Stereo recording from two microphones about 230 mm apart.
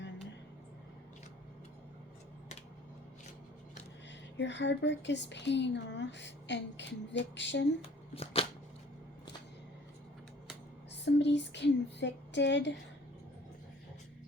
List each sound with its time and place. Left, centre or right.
4.4 s a woman's voice: left
7.8 s speech: left
11.0 s a woman's voice: left